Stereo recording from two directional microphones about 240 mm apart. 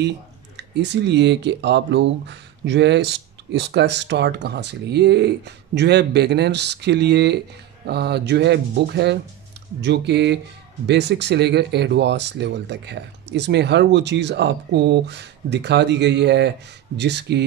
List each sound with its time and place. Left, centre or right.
0.6 s speech: right